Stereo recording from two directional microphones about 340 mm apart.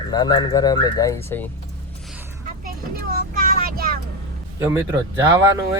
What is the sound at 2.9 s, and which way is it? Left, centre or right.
Vehicle, right.